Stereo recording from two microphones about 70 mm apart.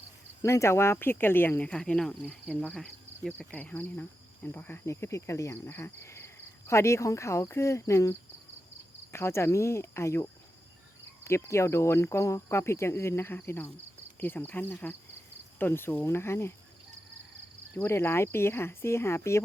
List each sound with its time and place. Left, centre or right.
0.4 s speech: left; by 3.6 s centre
3.6 s speech: left
4.9 s speech: left
9.1 s speech: left
15.5 s cricket: left
16.0 s speech: left
17.7 s speech: left